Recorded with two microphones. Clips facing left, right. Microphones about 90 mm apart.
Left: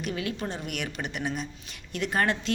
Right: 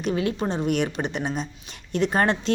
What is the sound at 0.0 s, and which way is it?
A woman's voice, 30° right (ahead or behind).